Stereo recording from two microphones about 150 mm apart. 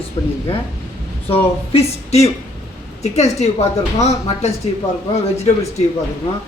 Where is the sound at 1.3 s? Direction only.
45° left (ahead or behind).